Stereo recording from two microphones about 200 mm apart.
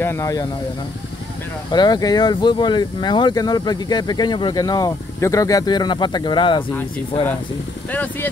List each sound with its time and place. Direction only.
0.0 s speech: 15° left (ahead or behind)
1.7 s speech: 20° left (ahead or behind)
7.9 s speech: 10° left (ahead or behind)